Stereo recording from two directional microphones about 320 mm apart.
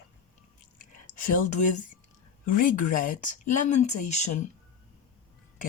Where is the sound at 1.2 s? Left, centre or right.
Left.